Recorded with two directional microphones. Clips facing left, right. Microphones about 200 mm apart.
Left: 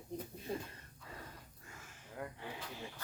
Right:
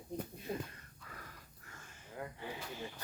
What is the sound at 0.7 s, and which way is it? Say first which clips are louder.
Wheeze: left 2 dB; 25° left (ahead or behind).